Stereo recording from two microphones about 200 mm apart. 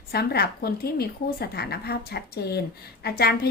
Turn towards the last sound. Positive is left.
turn(degrees=50)  # may be behind; listen again after turning